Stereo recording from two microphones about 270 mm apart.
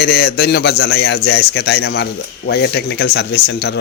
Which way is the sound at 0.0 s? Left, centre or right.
Left.